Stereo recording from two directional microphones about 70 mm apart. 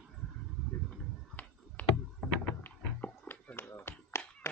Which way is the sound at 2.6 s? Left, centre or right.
Left.